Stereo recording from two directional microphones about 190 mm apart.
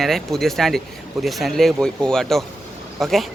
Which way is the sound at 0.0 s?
Centre (ahead or behind).